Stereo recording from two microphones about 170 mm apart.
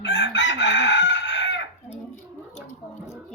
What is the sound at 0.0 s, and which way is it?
Chicken, 90° left.